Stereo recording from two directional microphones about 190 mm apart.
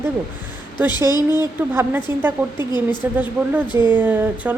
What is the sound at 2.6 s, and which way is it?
Speech, 20° left (ahead or behind).